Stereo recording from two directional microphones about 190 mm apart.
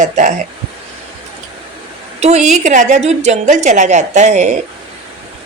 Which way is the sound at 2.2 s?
35° right (ahead or behind).